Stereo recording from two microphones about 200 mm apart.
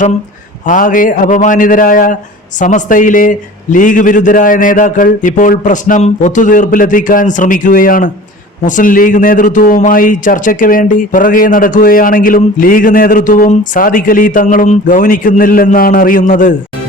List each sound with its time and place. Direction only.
0.6 s a man's voice: 40° left (ahead or behind)